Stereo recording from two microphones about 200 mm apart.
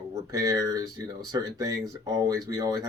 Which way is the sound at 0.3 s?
15° right (ahead or behind).